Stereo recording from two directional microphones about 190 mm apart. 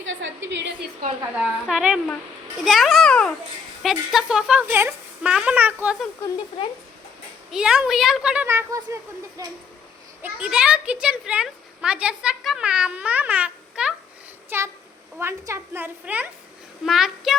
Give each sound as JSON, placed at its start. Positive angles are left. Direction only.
{"t": 0.0, "sound": "a sound", "side_deg": -70}
{"t": 1.4, "sound": "speech", "side_deg": -5}
{"t": 7.5, "sound": "speech", "side_deg": -5}
{"t": 10.2, "sound": "a woman's voice", "side_deg": -5}